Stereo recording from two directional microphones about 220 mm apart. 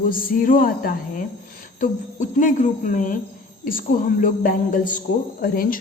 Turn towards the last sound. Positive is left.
turn(degrees=40)  # may be behind; listen again after turning